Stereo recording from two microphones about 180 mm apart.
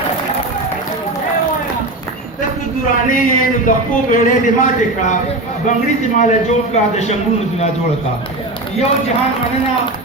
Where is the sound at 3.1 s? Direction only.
45° left (ahead or behind).